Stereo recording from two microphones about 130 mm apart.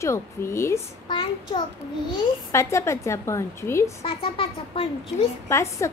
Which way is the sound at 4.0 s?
45° left (ahead or behind).